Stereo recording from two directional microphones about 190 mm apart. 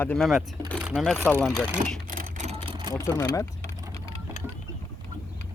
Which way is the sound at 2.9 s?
15° left (ahead or behind).